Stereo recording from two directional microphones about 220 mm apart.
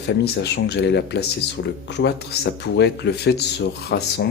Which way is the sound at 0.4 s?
50° left (ahead or behind).